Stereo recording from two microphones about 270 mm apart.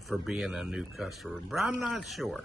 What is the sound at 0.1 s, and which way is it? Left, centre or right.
Speech, centre.